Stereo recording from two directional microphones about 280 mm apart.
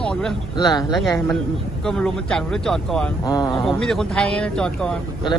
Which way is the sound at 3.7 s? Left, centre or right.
Centre.